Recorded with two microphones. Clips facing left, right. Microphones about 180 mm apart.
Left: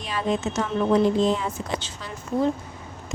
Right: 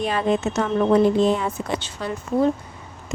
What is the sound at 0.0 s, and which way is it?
Speech, 55° right (ahead or behind).